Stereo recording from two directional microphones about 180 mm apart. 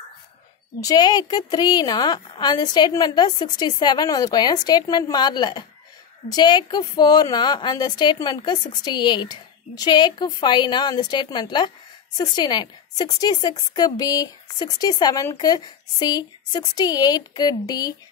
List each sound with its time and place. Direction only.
0.7 s a woman's voice: 20° left (ahead or behind)